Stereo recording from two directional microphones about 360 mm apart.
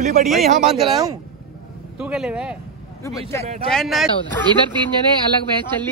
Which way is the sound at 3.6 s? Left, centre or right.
Centre.